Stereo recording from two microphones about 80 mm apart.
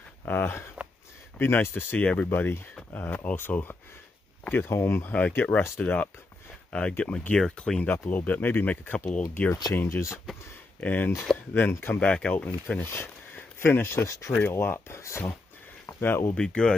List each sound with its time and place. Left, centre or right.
0.2 s speech: left; by 7.9 s centre
7.9 s speech: left
9.8 s speech: left
10.8 s speech: left
12.0 s speech: centre
12.8 s speech: left
14.0 s speech: left
14.4 s speech: left
16.3 s speech: centre